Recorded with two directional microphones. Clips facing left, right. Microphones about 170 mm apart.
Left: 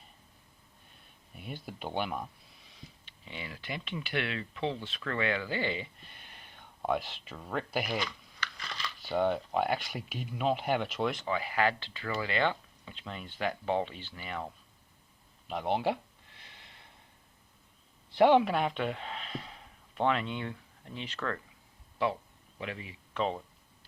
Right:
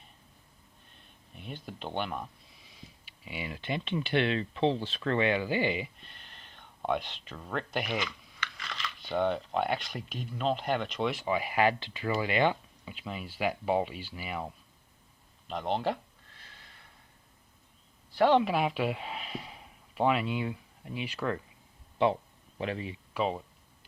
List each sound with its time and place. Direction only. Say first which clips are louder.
1.4 s speech: even; 5° left (ahead or behind)
3.1 s speech: right 5 dB; 10° right (ahead or behind)
6.0 s speech: even; 5° left (ahead or behind)
8.4 s a sound: right 1 dB; 35° left (ahead or behind)
9.0 s speech: even; 5° left (ahead or behind)
11.3 s speech: right 6 dB; 15° right (ahead or behind)
15.4 s speech: even; 10° left (ahead or behind)
16.4 s snort: even; 20° left (ahead or behind)
18.2 s speech: left 1 dB; 10° left (ahead or behind)
18.4 s speech: right 2 dB; 5° right (ahead or behind)
22.0 s a man's voice: right 5 dB; 25° right (ahead or behind)
23.1 s speech: right 1 dB; 5° right (ahead or behind)